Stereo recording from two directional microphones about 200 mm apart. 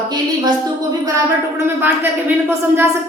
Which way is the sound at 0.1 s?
20° right (ahead or behind).